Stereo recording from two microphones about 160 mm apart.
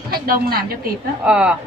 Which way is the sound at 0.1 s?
70° right (ahead or behind).